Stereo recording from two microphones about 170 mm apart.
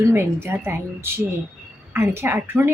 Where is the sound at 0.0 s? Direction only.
15° right (ahead or behind).